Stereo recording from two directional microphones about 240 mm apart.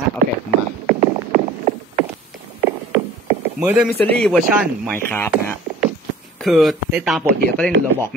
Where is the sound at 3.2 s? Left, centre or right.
Centre.